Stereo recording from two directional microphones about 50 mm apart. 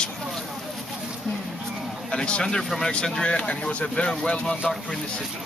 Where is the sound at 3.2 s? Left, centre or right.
Left.